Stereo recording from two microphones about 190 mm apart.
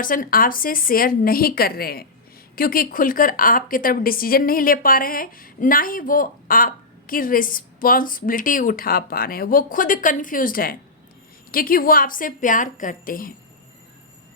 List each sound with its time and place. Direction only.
0.0 s a woman's voice: 45° left (ahead or behind)